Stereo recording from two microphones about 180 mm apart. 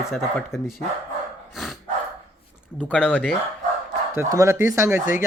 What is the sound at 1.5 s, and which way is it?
Dog, centre (ahead or behind).